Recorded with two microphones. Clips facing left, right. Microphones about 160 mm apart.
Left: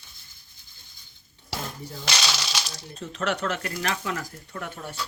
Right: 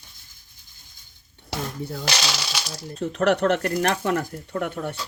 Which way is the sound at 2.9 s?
65° right (ahead or behind).